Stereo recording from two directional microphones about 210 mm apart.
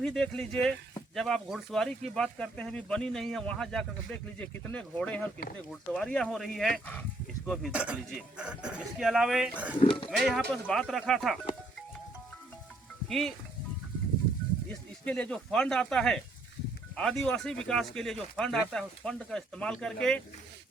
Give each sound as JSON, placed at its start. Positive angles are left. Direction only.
{"t": 0.0, "sound": "speech", "side_deg": 5}
{"t": 9.8, "sound": "speech", "side_deg": 25}
{"t": 10.1, "sound": "speech", "side_deg": 0}
{"t": 13.1, "sound": "speech", "side_deg": 0}
{"t": 14.7, "sound": "speech", "side_deg": 5}